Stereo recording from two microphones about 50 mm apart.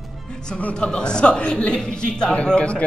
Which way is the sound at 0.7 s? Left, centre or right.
Centre.